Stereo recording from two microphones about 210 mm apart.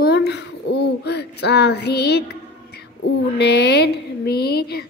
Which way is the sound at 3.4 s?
55° left (ahead or behind).